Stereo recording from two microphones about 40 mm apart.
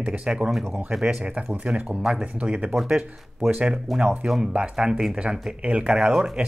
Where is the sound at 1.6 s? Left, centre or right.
Right.